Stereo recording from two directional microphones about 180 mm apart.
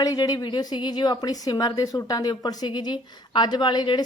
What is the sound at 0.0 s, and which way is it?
A woman's voice, 20° left (ahead or behind).